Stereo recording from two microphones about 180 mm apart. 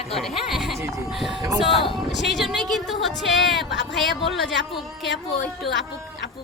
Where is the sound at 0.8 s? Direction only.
15° right (ahead or behind).